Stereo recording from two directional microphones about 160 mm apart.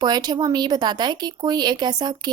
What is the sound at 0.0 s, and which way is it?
Speech, 25° right (ahead or behind).